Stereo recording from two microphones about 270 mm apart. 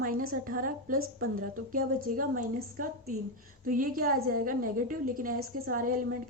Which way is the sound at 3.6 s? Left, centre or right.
Right.